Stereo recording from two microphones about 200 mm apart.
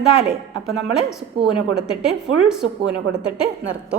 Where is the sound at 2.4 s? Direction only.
5° right (ahead or behind).